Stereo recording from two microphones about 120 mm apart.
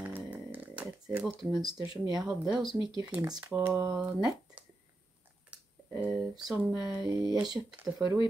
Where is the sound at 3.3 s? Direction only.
30° right (ahead or behind).